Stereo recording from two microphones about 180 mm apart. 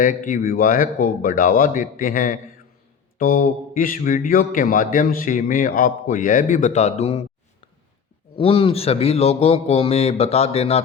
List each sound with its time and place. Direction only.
0.0 s a man's voice: 50° left (ahead or behind)
8.4 s a man's voice: 30° left (ahead or behind)